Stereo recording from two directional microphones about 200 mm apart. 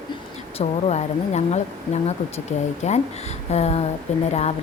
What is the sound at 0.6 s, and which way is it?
Speech, 35° left (ahead or behind).